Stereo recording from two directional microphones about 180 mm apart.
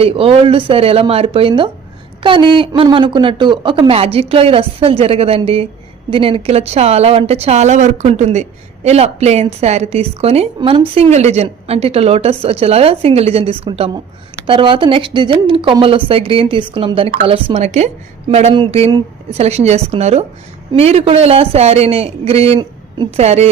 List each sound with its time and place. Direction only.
0.0 s a woman's voice: 30° right (ahead or behind)